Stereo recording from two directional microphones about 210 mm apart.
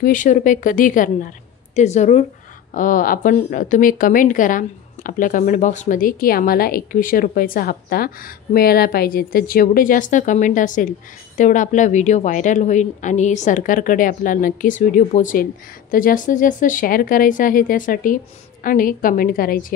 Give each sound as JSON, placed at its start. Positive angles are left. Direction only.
{"t": 0.0, "sound": "a woman's voice", "side_deg": 40}